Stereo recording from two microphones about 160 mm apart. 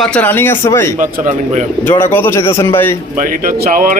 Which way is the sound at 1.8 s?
15° left (ahead or behind).